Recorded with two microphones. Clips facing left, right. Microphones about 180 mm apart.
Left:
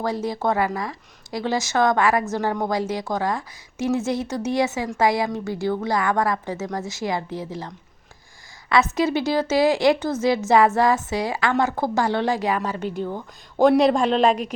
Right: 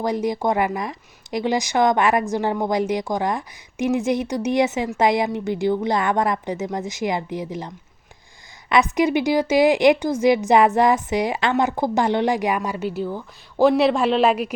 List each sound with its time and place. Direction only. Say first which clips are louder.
0.0 s a woman's voice: right 2 dB; 15° right (ahead or behind)
8.7 s a woman's voice: right 2 dB; 15° right (ahead or behind)